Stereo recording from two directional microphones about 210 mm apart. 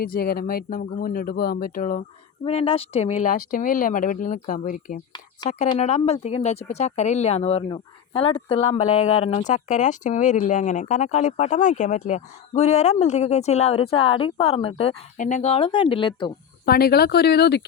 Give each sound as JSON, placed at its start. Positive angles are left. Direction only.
{"t": 0.0, "sound": "speech", "side_deg": 45}
{"t": 2.4, "sound": "speech", "side_deg": 25}
{"t": 16.6, "sound": "speech", "side_deg": 45}